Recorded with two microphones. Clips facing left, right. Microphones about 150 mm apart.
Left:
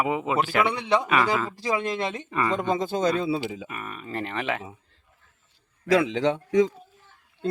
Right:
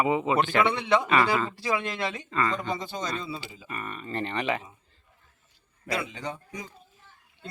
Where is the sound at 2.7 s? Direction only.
50° left (ahead or behind).